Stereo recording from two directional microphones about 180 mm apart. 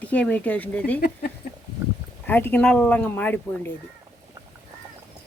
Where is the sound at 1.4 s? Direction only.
55° left (ahead or behind).